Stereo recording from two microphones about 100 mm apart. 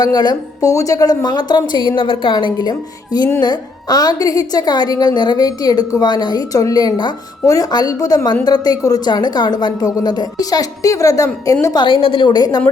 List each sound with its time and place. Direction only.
0.0 s a woman's voice: 45° left (ahead or behind)
0.7 s a woman's voice: 35° left (ahead or behind); by 2.3 s 55° left (ahead or behind)
2.3 s a woman's voice: 45° left (ahead or behind)
11.7 s a woman's voice: 45° left (ahead or behind)
11.9 s a woman's voice: 65° left (ahead or behind); by 12.6 s 45° left (ahead or behind)